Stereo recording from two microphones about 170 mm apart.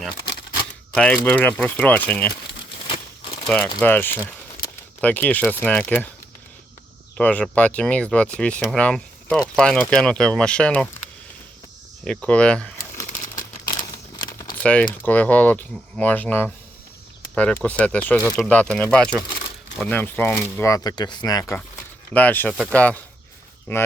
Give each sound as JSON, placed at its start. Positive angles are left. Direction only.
{"t": 0.9, "sound": "speech", "side_deg": 10}
{"t": 2.8, "sound": "crumpling", "side_deg": 35}
{"t": 3.8, "sound": "speech", "side_deg": 10}
{"t": 7.2, "sound": "speech", "side_deg": 5}
{"t": 12.0, "sound": "speech", "side_deg": 5}
{"t": 13.9, "sound": "a sound", "side_deg": 25}
{"t": 14.6, "sound": "speech", "side_deg": 5}
{"t": 17.6, "sound": "speech", "side_deg": 10}
{"t": 22.1, "sound": "speech", "side_deg": 10}